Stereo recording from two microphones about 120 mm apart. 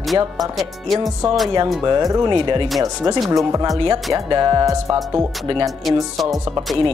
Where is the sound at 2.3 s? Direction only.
40° right (ahead or behind).